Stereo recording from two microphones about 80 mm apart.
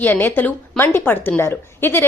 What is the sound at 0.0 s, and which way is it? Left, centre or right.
A woman's voice, left.